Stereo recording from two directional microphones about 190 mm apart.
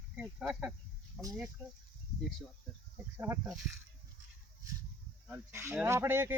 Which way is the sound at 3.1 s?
10° right (ahead or behind).